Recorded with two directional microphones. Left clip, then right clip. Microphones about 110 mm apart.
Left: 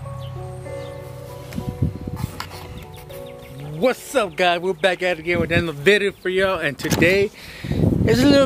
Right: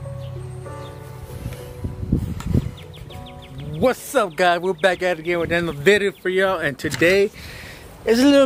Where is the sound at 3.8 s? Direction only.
15° right (ahead or behind).